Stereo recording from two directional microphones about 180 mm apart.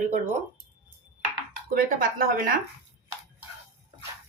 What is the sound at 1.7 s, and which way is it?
Speech, 50° right (ahead or behind).